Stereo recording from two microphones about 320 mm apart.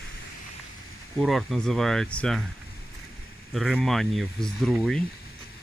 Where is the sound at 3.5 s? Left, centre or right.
Centre.